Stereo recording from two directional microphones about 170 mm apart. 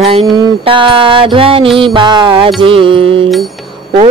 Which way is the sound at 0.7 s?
30° right (ahead or behind).